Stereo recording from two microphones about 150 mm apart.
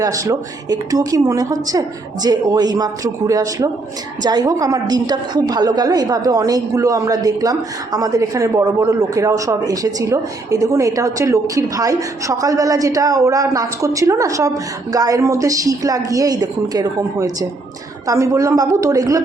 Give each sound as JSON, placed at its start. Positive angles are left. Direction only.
{"t": 0.0, "sound": "speech", "side_deg": -25}